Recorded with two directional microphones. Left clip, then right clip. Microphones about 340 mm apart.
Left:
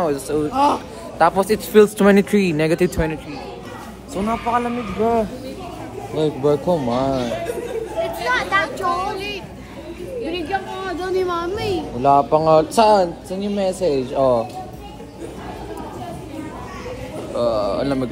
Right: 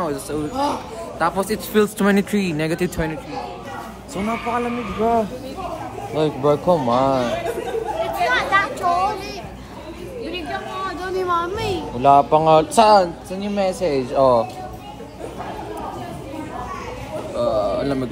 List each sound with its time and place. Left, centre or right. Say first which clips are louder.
0.0 s a man's voice: left 4 dB; centre
4.3 s a man's voice: left 2 dB; centre
6.6 s speech: right 3 dB; centre
8.0 s chatter: right 1 dB; centre
10.5 s a woman's voice: left 2 dB; centre
12.0 s speech: right 2 dB; centre
12.9 s a man's voice: right 2 dB; centre
13.9 s speech: right 4 dB; centre
17.4 s a man's voice: left 1 dB; centre